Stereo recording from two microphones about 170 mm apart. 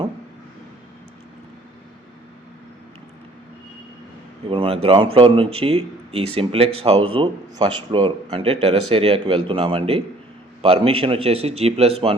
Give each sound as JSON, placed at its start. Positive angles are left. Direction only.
{"t": 4.4, "sound": "speech", "side_deg": -30}